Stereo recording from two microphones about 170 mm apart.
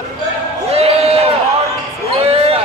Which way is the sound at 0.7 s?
35° right (ahead or behind).